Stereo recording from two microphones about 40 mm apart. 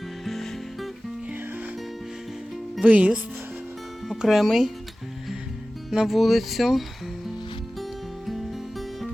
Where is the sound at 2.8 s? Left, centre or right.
Right.